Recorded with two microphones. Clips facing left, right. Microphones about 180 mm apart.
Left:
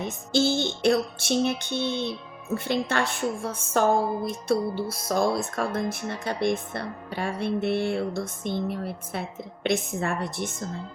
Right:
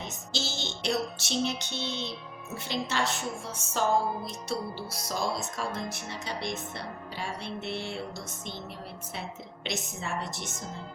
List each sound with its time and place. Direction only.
0.0 s music: 55° left (ahead or behind)